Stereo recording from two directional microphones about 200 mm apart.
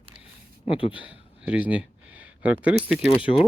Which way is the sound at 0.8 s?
25° left (ahead or behind).